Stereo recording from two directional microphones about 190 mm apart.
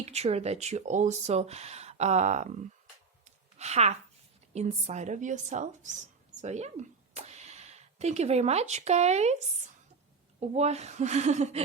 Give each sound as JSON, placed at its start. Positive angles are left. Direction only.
{"t": 0.0, "sound": "speech", "side_deg": -35}
{"t": 3.2, "sound": "a sound", "side_deg": -35}
{"t": 4.5, "sound": "speech", "side_deg": -35}
{"t": 10.4, "sound": "speech", "side_deg": -35}